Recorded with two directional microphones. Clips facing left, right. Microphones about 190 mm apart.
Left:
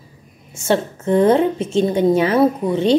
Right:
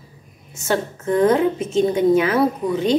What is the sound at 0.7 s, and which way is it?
A woman's voice, 30° left (ahead or behind).